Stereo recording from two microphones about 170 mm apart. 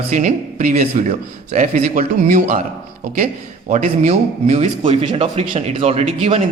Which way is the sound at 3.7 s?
45° right (ahead or behind).